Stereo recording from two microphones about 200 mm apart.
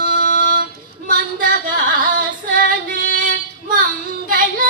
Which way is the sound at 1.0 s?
45° right (ahead or behind).